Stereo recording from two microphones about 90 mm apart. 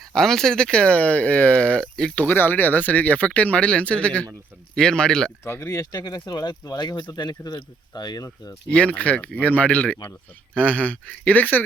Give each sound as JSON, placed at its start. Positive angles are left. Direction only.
{"t": 0.1, "sound": "speech", "side_deg": 5}
{"t": 2.2, "sound": "speech", "side_deg": 20}
{"t": 5.5, "sound": "speech", "side_deg": 35}
{"t": 8.7, "sound": "speech", "side_deg": 15}